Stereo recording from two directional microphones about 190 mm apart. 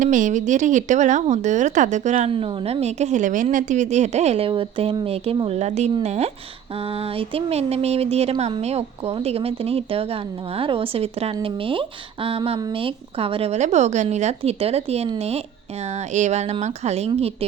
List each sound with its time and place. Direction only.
0.0 s a woman's voice: 40° right (ahead or behind)
16.1 s speech: 35° right (ahead or behind)